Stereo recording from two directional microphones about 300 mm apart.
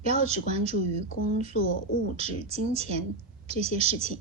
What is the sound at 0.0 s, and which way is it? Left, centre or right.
Speech, right.